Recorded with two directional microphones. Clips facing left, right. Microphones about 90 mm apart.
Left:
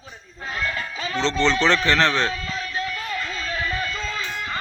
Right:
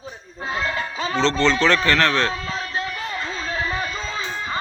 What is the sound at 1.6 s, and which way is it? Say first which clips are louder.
Speech: right 1 dB; 25° left (ahead or behind).